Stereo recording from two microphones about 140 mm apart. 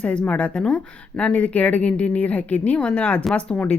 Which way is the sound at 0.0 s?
10° left (ahead or behind).